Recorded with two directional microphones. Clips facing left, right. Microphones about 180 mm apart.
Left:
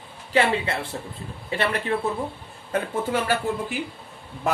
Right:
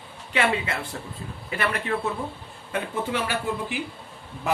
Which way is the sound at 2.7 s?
40° left (ahead or behind).